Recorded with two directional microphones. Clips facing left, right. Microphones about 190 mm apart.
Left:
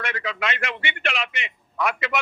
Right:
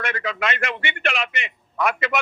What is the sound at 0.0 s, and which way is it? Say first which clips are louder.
A man's voice: right 2 dB; 50° right (ahead or behind).